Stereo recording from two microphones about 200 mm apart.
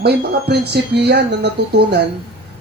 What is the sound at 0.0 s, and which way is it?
Speech, 55° right (ahead or behind).